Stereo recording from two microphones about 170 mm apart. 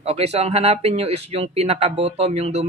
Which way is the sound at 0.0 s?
35° right (ahead or behind).